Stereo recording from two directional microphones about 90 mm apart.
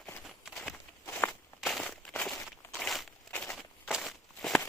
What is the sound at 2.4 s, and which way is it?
Walk, centre (ahead or behind).